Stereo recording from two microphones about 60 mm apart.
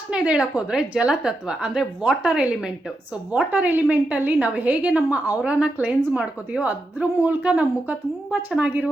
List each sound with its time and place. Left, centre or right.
0.1 s a woman's voice: centre